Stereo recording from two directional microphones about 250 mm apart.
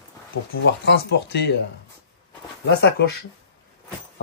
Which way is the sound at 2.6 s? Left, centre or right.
Left.